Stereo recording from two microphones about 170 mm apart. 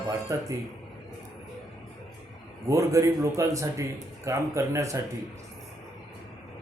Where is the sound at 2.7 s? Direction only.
20° right (ahead or behind).